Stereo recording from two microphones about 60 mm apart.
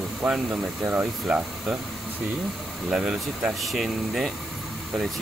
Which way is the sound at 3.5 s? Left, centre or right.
Centre.